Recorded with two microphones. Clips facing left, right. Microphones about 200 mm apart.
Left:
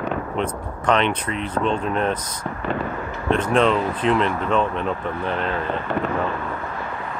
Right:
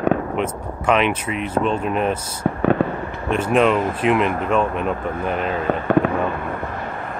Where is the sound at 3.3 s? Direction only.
10° right (ahead or behind).